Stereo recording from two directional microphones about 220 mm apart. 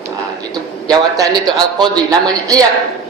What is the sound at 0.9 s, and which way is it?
Speech, 15° right (ahead or behind).